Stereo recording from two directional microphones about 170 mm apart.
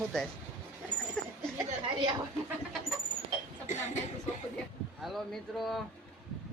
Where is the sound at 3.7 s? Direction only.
45° left (ahead or behind).